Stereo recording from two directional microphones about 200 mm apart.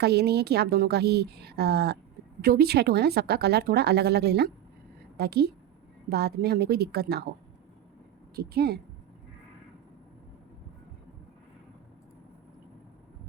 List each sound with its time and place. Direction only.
0.0 s a woman's voice: 55° right (ahead or behind)
8.4 s speech: 55° right (ahead or behind)